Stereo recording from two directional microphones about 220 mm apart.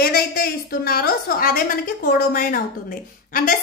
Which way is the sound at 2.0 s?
40° left (ahead or behind).